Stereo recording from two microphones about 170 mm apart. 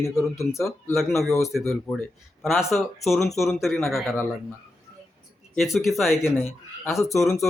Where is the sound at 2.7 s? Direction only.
Centre (ahead or behind).